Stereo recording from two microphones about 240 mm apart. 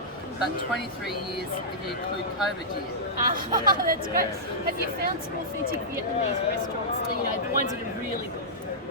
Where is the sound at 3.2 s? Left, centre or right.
Right.